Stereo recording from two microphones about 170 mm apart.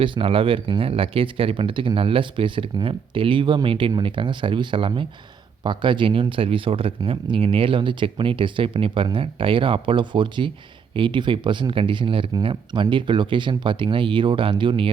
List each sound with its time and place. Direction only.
0.0 s speech: 30° right (ahead or behind)